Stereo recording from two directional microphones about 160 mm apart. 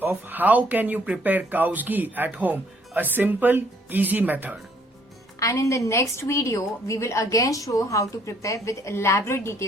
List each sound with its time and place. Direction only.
0.0 s speech: 10° right (ahead or behind)
5.4 s a woman's voice: 20° left (ahead or behind)